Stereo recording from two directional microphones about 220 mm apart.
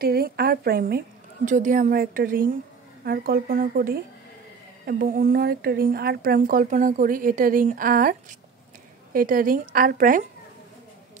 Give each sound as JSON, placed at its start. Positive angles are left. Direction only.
{"t": 0.0, "sound": "a woman's voice", "side_deg": -45}